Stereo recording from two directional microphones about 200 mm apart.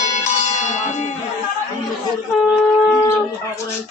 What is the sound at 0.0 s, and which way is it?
Music, 35° left (ahead or behind).